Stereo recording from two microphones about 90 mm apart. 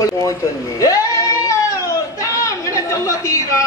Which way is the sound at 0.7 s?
35° left (ahead or behind).